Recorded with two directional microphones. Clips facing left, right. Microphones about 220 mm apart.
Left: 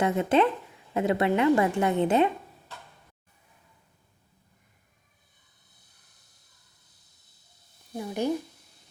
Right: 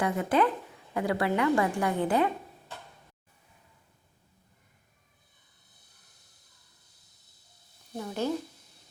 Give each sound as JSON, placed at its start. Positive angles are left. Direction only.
{"t": 0.0, "sound": "a woman's voice", "side_deg": 25}
{"t": 7.9, "sound": "a woman's voice", "side_deg": 15}